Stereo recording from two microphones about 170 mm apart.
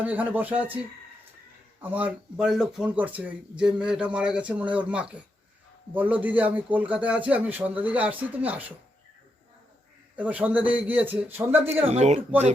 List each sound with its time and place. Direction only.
0.0 s speech: 10° right (ahead or behind)
1.8 s speech: 10° right (ahead or behind)
10.2 s speech: 10° right (ahead or behind)
11.9 s speech: 40° right (ahead or behind)